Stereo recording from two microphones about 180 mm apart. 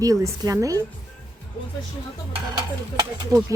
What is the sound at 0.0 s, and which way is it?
Speech, 20° right (ahead or behind).